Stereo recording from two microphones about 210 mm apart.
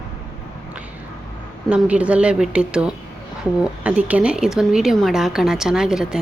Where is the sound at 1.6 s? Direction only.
5° right (ahead or behind).